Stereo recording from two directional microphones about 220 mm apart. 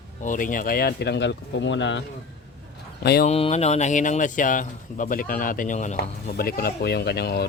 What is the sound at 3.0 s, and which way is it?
Speech, 45° left (ahead or behind).